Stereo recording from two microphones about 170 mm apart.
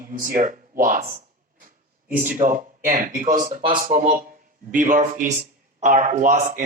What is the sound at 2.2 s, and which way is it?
Speech, 15° right (ahead or behind).